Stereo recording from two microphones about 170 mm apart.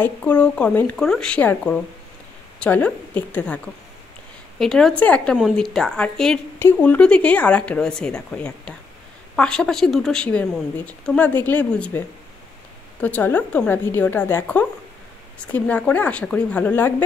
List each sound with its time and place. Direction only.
0.0 s a woman's voice: 10° left (ahead or behind)
13.0 s speech: 10° left (ahead or behind)